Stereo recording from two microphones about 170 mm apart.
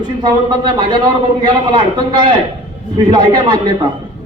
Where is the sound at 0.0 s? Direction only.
25° right (ahead or behind).